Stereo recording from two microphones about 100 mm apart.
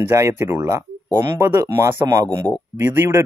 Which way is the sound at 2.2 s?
10° left (ahead or behind).